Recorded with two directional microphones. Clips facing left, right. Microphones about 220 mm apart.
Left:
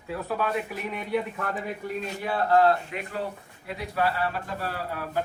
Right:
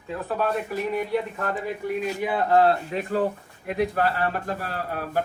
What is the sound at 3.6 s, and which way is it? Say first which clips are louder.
Speech: right 4 dB; 50° right (ahead or behind).